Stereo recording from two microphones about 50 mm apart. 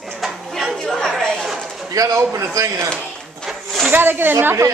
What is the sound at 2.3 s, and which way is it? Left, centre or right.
Speech, right.